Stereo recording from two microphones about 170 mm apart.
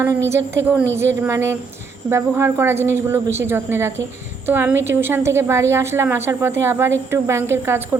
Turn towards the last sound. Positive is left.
turn(degrees=-15)  # may be behind; listen again after turning